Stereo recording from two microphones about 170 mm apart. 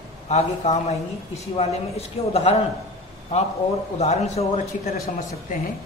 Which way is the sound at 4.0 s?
40° left (ahead or behind).